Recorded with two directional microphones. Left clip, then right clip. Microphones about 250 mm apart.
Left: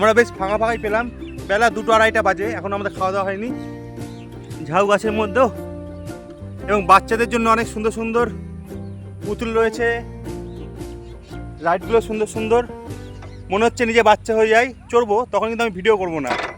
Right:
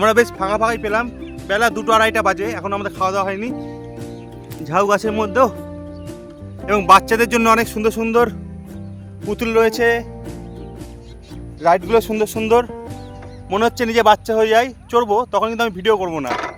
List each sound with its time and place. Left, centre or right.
0.0 s speech: centre
6.7 s speech: centre; by 10.1 s right
11.9 s speech: right
13.5 s speech: centre